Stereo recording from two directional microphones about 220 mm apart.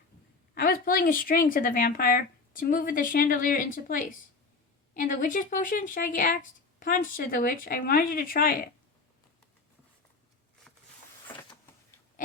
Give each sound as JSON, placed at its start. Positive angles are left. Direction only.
{"t": 0.5, "sound": "speech", "side_deg": 40}